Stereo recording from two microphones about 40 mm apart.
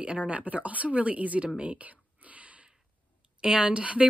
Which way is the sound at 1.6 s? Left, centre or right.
Right.